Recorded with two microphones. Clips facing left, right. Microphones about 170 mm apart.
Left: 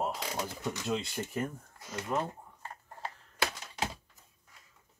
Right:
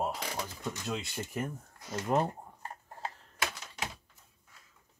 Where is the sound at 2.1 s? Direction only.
50° right (ahead or behind).